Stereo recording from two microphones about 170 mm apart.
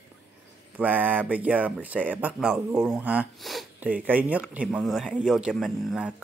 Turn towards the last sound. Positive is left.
turn(degrees=-5)  # may be behind; listen again after turning